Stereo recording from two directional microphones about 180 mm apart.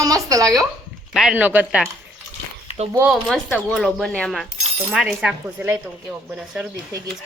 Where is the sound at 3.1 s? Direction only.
Centre (ahead or behind).